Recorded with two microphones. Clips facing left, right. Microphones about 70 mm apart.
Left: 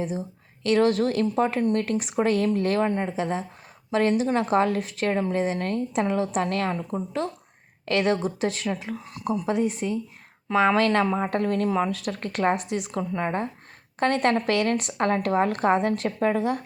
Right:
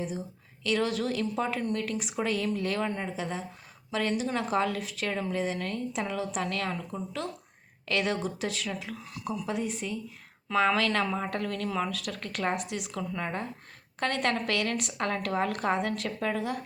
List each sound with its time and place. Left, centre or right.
0.6 s speech: left
9.5 s speech: left